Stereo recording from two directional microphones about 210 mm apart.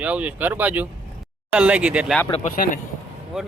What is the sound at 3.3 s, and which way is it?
Speech, 5° right (ahead or behind).